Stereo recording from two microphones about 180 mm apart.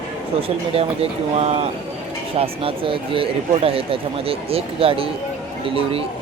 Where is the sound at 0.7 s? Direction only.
30° right (ahead or behind).